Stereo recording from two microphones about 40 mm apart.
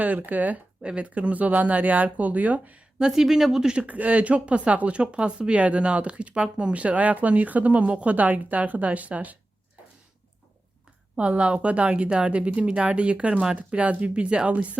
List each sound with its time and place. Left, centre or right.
0.3 s speech: right
0.8 s speech: right
3.1 s speech: centre
3.8 s speech: right
11.2 s a woman's voice: right